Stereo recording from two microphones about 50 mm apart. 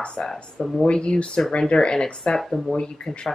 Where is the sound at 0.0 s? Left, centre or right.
Centre.